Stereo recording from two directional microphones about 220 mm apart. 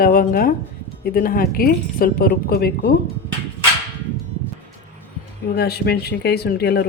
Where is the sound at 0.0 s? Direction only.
40° left (ahead or behind).